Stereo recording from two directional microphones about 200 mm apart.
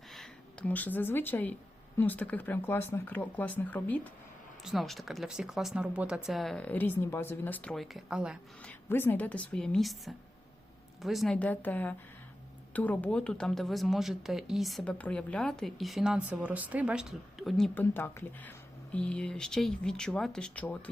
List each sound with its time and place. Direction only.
0.1 s speech: 5° left (ahead or behind)
8.9 s speech: 10° left (ahead or behind)